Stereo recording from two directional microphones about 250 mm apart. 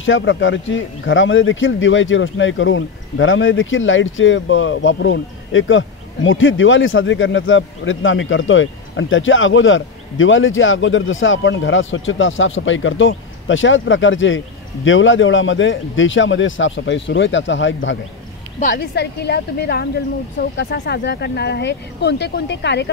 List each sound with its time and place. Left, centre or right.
0.0 s a man's voice: left
18.6 s a man's voice: left